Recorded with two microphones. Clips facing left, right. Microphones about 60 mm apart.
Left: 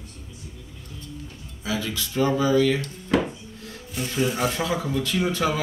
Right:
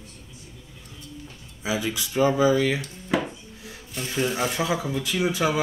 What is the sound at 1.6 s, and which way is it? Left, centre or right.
Speech, centre.